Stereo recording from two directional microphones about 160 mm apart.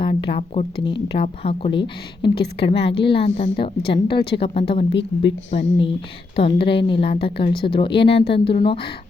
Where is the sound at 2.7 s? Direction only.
90° left.